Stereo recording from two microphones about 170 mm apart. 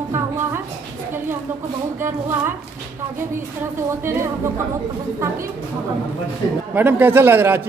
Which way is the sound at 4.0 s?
15° right (ahead or behind).